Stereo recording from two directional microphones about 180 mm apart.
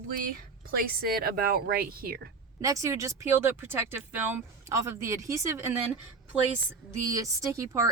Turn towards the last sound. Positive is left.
turn(degrees=-20)  # may be behind; listen again after turning